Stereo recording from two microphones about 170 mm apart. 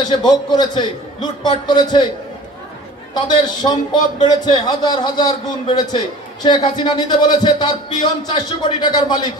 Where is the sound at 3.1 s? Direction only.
25° left (ahead or behind).